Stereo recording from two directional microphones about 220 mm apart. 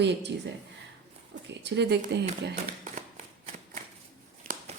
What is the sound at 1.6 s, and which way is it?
Speech, 50° right (ahead or behind).